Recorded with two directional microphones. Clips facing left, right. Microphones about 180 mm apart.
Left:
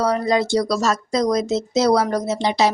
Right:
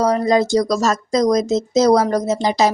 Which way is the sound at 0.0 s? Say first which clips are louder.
Right 3 dB; 40° right (ahead or behind).